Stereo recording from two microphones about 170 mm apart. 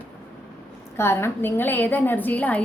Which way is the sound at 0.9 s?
15° left (ahead or behind).